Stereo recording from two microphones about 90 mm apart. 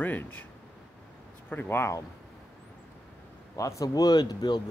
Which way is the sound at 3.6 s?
40° left (ahead or behind).